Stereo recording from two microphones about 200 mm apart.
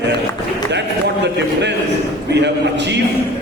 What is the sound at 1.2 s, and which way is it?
A man's voice, 60° right (ahead or behind).